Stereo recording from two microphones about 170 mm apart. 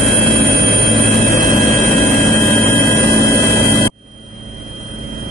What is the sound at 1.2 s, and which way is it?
Vehicle, 20° left (ahead or behind).